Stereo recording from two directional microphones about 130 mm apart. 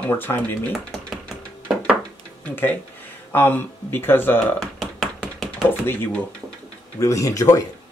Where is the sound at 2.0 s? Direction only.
15° left (ahead or behind).